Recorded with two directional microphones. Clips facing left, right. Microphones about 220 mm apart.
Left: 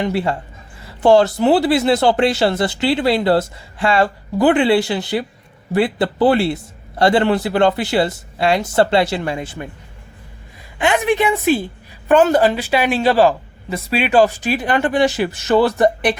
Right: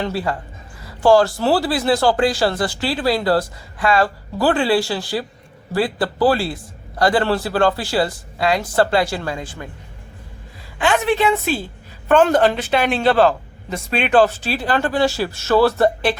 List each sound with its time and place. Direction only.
0.0 s a man's voice: 20° left (ahead or behind)
10.8 s a man's voice: 20° left (ahead or behind)